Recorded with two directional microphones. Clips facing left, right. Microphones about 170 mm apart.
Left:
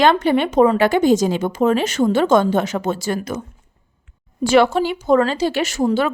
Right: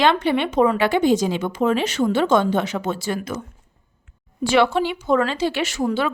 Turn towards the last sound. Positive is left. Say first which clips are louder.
# left 3 dB
turn(degrees=40)  # may be behind; listen again after turning